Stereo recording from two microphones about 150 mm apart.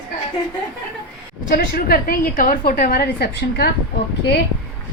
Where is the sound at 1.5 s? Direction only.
85° left.